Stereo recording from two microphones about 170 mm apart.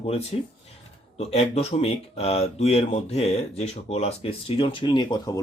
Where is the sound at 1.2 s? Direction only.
35° left (ahead or behind).